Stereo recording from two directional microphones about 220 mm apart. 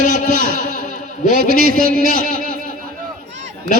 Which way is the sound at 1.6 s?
40° right (ahead or behind).